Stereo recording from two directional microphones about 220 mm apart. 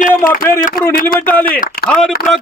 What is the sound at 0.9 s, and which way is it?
Speech, 40° left (ahead or behind).